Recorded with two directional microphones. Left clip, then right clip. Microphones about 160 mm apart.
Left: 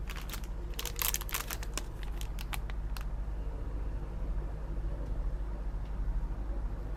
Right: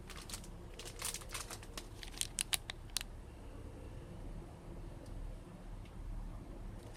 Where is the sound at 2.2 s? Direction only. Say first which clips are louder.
Right 5 dB; 15° right (ahead or behind).